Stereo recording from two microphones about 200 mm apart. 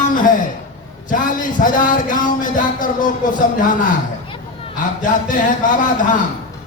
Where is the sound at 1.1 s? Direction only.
40° left (ahead or behind).